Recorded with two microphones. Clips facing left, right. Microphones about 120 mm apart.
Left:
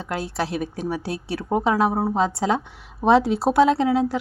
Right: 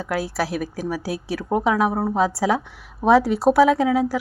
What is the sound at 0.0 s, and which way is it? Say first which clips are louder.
A woman's voice: right 2 dB; 5° right (ahead or behind).